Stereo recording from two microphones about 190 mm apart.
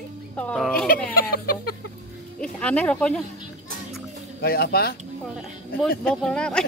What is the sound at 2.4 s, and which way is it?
Speech, 5° left (ahead or behind).